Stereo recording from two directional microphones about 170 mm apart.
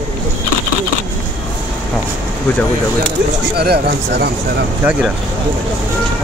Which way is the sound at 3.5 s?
70° right (ahead or behind).